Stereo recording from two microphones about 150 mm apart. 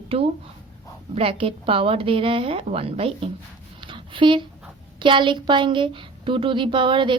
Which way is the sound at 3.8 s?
35° right (ahead or behind).